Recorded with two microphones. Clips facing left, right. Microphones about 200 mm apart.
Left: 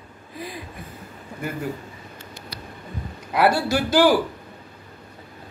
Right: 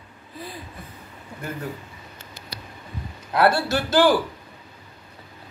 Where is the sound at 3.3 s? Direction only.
10° left (ahead or behind).